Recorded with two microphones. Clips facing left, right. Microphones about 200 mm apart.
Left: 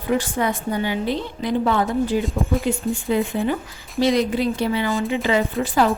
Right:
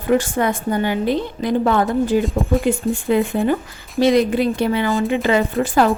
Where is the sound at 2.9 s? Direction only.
55° right (ahead or behind).